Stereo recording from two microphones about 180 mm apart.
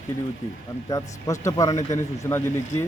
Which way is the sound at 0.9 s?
20° left (ahead or behind).